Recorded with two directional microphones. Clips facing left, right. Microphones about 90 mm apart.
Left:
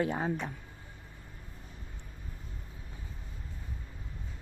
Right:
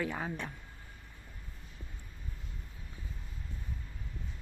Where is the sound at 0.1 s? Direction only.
30° left (ahead or behind).